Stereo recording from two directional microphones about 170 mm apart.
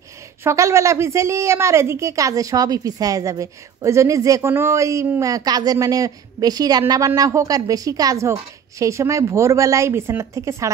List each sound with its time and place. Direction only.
0.4 s speech: 15° right (ahead or behind)